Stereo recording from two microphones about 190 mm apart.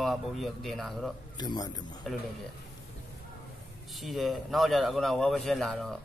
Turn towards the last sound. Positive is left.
turn(degrees=0)  # may be behind; listen again after turning